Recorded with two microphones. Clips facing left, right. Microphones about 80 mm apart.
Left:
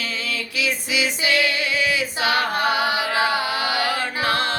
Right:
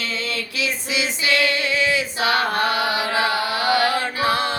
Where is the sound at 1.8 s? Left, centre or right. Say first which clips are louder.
Right 1 dB; right.